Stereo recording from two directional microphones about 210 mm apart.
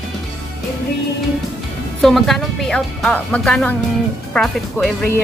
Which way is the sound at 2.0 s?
Centre (ahead or behind).